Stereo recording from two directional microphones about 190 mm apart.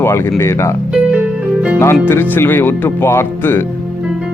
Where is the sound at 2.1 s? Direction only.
10° left (ahead or behind).